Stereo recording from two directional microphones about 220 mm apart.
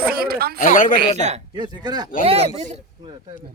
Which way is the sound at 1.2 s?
30° right (ahead or behind).